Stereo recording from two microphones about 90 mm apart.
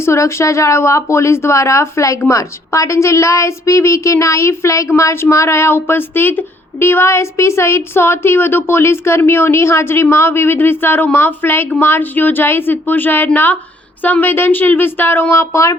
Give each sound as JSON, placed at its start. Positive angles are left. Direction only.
{"t": 0.0, "sound": "a woman's voice", "side_deg": 30}